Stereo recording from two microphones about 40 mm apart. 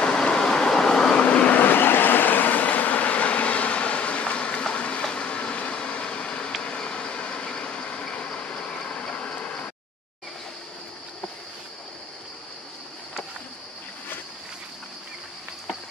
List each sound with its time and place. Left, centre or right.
0.0 s vehicle: left
1.1 s vehicle: left
6.6 s a sound: left